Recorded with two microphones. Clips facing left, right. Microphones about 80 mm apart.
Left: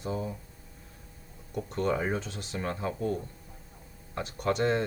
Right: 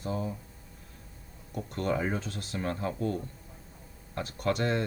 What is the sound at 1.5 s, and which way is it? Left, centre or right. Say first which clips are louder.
Speech: left 2 dB; centre.